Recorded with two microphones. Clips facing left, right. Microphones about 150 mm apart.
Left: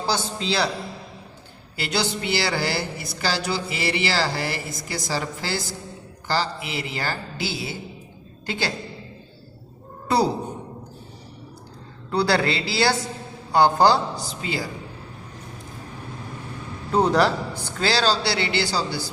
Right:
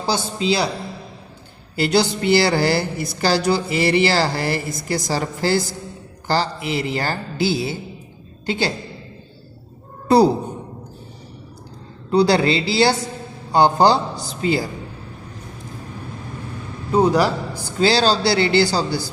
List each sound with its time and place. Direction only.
0.0 s a man's voice: 15° right (ahead or behind)
1.7 s a woman's voice: 40° right (ahead or behind)
8.4 s a woman's voice: 20° right (ahead or behind)
12.1 s a woman's voice: 20° right (ahead or behind)
16.9 s a man's voice: 5° right (ahead or behind)
17.7 s a woman's voice: 20° right (ahead or behind)
18.0 s speech: 35° right (ahead or behind)